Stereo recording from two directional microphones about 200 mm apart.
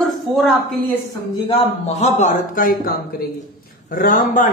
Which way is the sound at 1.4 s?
30° left (ahead or behind).